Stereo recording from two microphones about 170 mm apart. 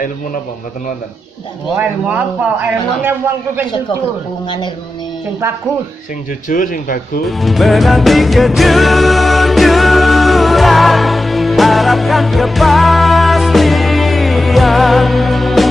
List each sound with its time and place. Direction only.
1.8 s a man's voice: 10° right (ahead or behind)
6.5 s speech: 50° left (ahead or behind)
7.2 s music: centre (ahead or behind)